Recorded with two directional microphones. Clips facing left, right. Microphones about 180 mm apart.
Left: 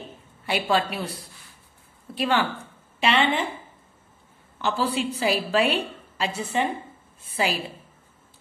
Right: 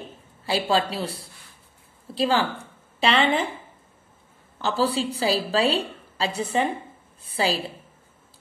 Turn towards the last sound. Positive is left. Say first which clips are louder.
# right 1 dB
turn(degrees=-35)  # may be behind; listen again after turning